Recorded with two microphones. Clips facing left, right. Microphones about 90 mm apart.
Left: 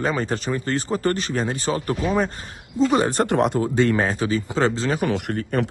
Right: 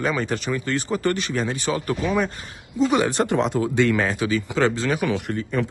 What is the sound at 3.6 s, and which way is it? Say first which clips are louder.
Speech: even; 35° left (ahead or behind).